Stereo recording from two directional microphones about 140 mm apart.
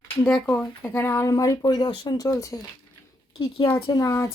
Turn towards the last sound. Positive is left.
turn(degrees=25)  # may be behind; listen again after turning